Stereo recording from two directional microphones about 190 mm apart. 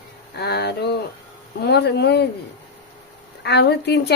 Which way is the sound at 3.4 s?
60° left (ahead or behind).